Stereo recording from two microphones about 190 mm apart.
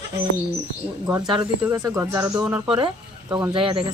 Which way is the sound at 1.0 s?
20° right (ahead or behind).